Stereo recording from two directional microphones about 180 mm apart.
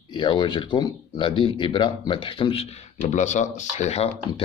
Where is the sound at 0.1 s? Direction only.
25° left (ahead or behind).